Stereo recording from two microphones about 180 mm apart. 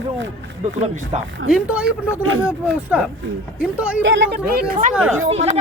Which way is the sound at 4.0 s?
85° right.